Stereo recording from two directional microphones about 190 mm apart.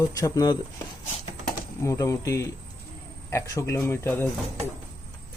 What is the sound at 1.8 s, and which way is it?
Speech, 15° left (ahead or behind).